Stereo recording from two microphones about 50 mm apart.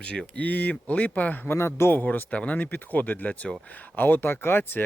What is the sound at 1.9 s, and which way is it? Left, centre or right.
Speech, left.